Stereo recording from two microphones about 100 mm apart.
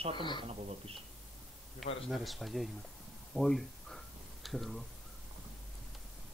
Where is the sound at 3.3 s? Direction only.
Centre (ahead or behind).